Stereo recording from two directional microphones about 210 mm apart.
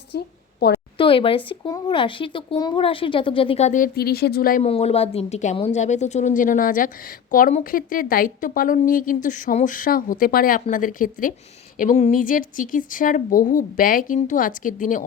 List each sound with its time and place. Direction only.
0.1 s a woman's voice: 50° left (ahead or behind)
0.9 s a sound: 25° left (ahead or behind)
1.5 s speech: 20° left (ahead or behind); by 4.6 s 45° left (ahead or behind)
4.6 s a woman's voice: 30° left (ahead or behind)